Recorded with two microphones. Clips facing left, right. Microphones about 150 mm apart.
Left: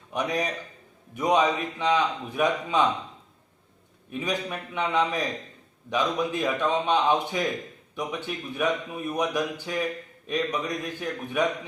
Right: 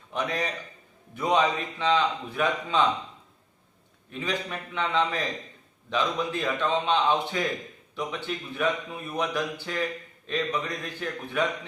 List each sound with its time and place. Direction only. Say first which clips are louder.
0.1 s a man's voice: left 2 dB; 15° left (ahead or behind)
4.1 s a man's voice: left 2 dB; 15° left (ahead or behind)